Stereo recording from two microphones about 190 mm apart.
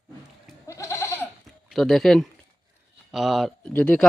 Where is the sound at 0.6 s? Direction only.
15° left (ahead or behind).